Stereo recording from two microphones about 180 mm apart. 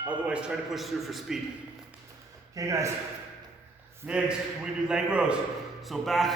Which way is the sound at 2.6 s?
15° right (ahead or behind).